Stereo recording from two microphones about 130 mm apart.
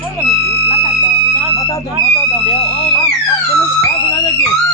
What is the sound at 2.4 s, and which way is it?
Speech, 50° left (ahead or behind).